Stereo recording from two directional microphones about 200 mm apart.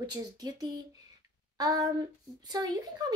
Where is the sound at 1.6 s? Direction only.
15° right (ahead or behind).